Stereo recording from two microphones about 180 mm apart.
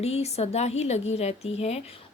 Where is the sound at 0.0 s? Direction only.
35° left (ahead or behind).